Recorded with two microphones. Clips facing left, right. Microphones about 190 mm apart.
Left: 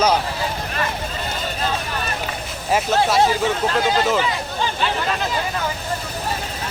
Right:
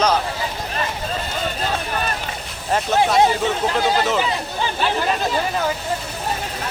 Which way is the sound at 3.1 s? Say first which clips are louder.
Right 1 dB; 20° right (ahead or behind).